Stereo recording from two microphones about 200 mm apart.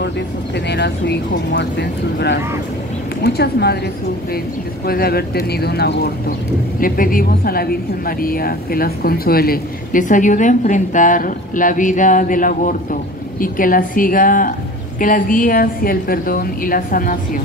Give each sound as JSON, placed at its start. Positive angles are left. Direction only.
{"t": 0.7, "sound": "speech", "side_deg": 60}
{"t": 4.8, "sound": "speech", "side_deg": 50}